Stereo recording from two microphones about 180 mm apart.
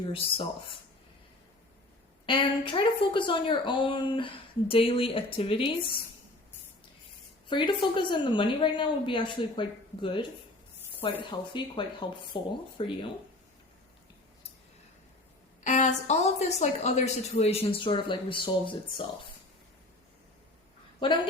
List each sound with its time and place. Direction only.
0.1 s a woman's voice: 30° left (ahead or behind)
2.2 s a woman's voice: 30° left (ahead or behind)
7.4 s a woman's voice: 25° left (ahead or behind)
15.6 s a woman's voice: 40° left (ahead or behind)